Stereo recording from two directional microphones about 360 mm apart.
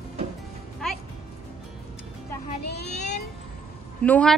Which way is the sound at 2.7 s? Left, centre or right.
Left.